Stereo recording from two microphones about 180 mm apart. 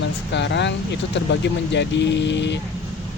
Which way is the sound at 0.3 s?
75° left (ahead or behind).